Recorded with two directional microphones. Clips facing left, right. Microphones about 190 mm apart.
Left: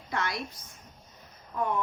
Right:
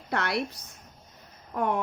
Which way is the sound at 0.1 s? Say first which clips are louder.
Right 4 dB; 65° right (ahead or behind).